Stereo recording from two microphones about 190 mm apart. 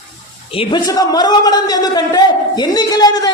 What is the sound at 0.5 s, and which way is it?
A man's voice, 30° left (ahead or behind).